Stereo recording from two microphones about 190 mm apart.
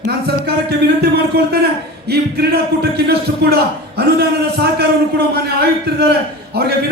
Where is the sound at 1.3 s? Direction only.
50° right (ahead or behind).